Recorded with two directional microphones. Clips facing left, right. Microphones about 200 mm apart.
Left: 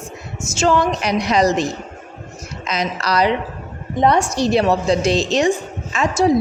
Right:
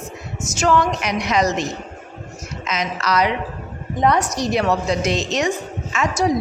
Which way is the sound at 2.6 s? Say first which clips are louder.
Left 1 dB; 35° left (ahead or behind).